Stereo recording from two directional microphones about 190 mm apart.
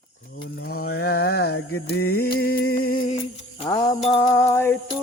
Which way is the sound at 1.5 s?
90° left.